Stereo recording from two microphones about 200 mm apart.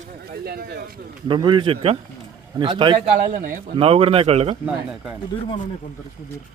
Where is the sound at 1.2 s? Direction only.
25° right (ahead or behind).